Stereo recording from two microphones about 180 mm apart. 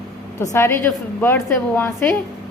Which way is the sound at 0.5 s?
15° left (ahead or behind).